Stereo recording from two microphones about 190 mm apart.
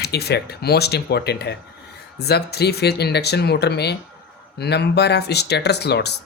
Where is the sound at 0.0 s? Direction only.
60° left (ahead or behind).